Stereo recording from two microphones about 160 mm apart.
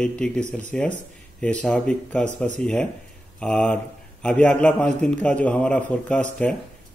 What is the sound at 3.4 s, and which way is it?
Speech, 5° left (ahead or behind).